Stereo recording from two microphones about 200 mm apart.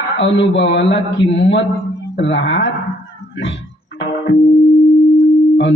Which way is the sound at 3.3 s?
70° left (ahead or behind).